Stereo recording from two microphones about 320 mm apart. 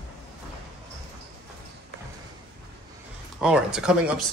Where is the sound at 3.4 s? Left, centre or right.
Centre.